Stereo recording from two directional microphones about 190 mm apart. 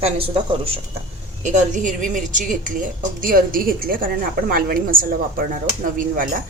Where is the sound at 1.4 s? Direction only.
40° right (ahead or behind).